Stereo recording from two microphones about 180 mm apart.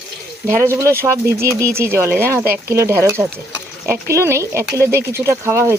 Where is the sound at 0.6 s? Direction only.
15° right (ahead or behind).